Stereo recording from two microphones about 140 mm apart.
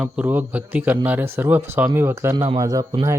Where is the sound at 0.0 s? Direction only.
10° right (ahead or behind).